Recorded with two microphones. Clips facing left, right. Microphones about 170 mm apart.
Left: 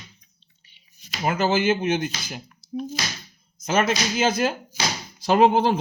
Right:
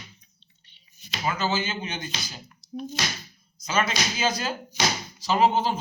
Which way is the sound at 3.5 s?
50° left (ahead or behind).